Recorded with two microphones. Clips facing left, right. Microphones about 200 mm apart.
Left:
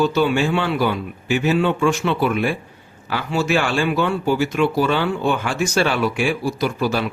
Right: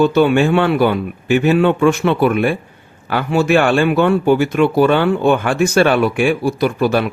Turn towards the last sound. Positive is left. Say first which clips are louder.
# right 5 dB
turn(degrees=-55)  # may be behind; listen again after turning